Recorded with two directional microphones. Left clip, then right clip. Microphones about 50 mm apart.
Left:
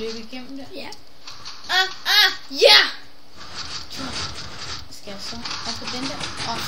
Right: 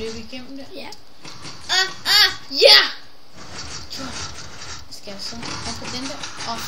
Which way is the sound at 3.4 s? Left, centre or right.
Left.